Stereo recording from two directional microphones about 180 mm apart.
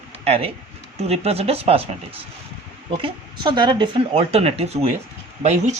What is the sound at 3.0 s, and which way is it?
A man's voice, 25° right (ahead or behind).